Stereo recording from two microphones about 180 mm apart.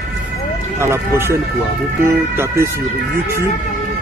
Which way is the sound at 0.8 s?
15° right (ahead or behind).